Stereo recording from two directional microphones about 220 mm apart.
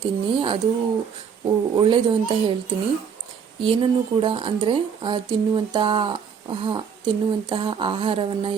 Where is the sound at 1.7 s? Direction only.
20° right (ahead or behind).